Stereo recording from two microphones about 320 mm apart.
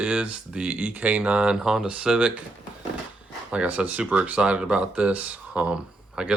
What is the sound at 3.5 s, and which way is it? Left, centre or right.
Speech, centre.